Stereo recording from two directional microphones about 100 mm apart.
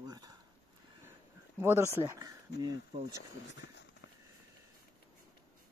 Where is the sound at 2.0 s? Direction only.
40° right (ahead or behind).